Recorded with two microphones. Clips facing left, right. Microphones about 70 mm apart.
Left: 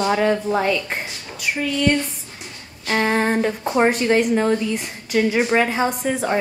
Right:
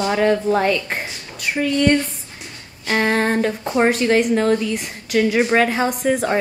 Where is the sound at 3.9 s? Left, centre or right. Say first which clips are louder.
Right 1 dB; centre.